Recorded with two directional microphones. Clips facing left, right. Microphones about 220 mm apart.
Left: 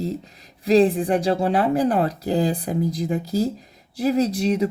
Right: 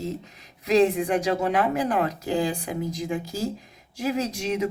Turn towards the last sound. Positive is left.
turn(degrees=35)  # may be behind; listen again after turning